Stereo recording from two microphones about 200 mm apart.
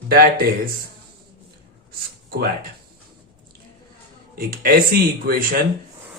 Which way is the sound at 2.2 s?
50° right (ahead or behind).